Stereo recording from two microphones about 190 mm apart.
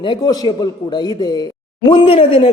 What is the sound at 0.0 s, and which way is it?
A man's voice, 20° left (ahead or behind).